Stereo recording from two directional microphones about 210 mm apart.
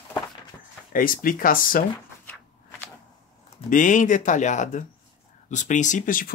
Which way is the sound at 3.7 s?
40° left (ahead or behind).